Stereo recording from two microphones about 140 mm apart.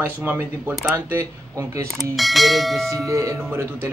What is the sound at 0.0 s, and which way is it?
A man's voice, 15° right (ahead or behind).